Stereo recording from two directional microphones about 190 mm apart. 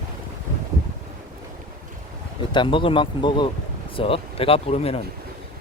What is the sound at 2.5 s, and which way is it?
Speech, 25° left (ahead or behind).